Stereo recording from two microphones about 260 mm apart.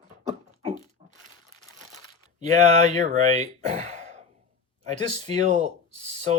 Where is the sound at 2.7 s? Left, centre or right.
Right.